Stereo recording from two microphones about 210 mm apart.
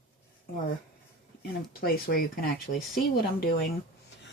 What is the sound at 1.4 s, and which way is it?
Speech, 45° left (ahead or behind).